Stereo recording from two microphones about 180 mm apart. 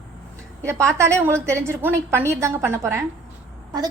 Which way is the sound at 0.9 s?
15° right (ahead or behind).